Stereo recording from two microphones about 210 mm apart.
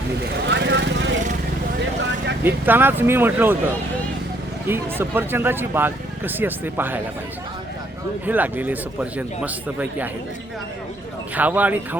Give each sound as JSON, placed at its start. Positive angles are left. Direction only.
{"t": 0.4, "sound": "vehicle", "side_deg": -55}
{"t": 2.4, "sound": "speech", "side_deg": -10}
{"t": 4.7, "sound": "speech", "side_deg": -10}
{"t": 8.3, "sound": "speech", "side_deg": -10}
{"t": 11.3, "sound": "speech", "side_deg": -10}